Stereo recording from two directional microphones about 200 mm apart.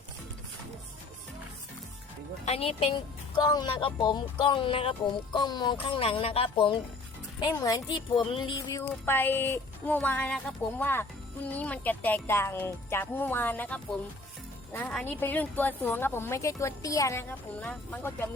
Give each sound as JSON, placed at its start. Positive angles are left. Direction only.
{"t": 2.4, "sound": "speech", "side_deg": 30}